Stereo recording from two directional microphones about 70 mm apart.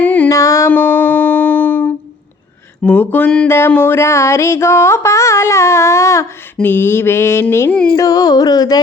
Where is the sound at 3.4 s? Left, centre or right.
Left.